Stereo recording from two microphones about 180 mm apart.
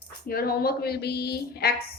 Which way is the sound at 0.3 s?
55° left (ahead or behind).